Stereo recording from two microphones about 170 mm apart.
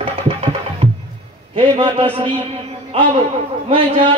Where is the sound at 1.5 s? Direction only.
30° right (ahead or behind).